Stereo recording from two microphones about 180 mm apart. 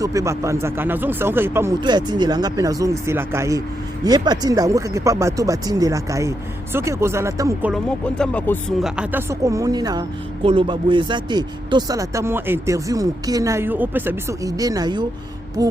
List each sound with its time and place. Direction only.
0.0 s speech: 20° right (ahead or behind)
1.8 s a woman's voice: 25° right (ahead or behind)
7.7 s speech: 5° left (ahead or behind)
9.0 s a woman's voice: 15° right (ahead or behind)